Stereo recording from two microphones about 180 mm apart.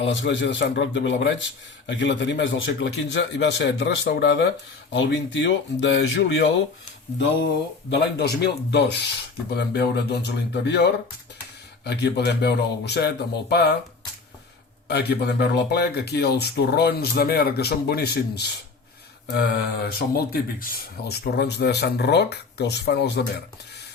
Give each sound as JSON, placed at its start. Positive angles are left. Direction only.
{"t": 0.0, "sound": "a man's voice", "side_deg": 85}
{"t": 7.9, "sound": "speech", "side_deg": 65}
{"t": 14.8, "sound": "speech", "side_deg": 65}